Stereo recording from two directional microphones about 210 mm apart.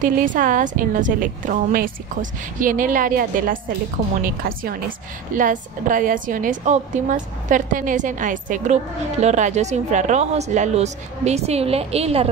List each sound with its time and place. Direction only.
0.0 s speech: 40° right (ahead or behind)